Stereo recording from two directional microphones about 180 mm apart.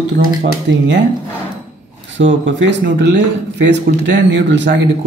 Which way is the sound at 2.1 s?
90° right.